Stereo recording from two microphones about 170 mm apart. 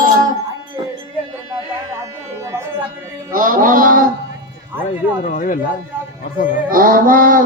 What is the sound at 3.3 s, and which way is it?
Mantra, 55° right (ahead or behind).